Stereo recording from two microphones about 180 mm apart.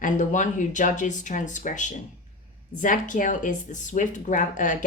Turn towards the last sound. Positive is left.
turn(degrees=45)  # may be behind; listen again after turning